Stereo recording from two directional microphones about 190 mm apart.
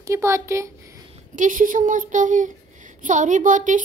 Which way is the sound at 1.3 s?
45° right (ahead or behind).